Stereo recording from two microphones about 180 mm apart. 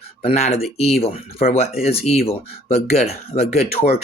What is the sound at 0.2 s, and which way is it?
Speech, 35° left (ahead or behind).